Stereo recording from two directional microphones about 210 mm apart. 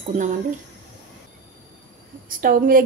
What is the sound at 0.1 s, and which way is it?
Speech, 35° right (ahead or behind).